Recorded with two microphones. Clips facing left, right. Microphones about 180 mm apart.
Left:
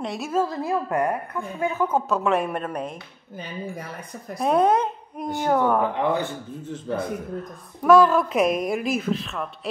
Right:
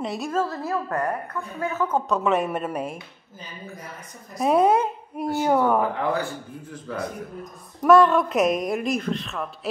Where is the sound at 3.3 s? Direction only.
60° left (ahead or behind).